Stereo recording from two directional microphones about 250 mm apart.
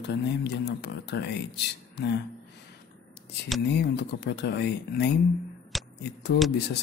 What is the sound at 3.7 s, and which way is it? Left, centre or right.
Speech, left.